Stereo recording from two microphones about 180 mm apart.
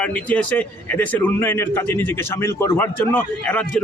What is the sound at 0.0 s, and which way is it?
Speech, 5° left (ahead or behind).